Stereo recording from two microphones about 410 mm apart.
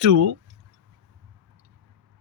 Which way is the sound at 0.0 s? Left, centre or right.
Right.